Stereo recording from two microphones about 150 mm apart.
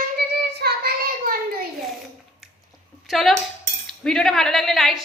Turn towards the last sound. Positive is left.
turn(degrees=0)  # may be behind; listen again after turning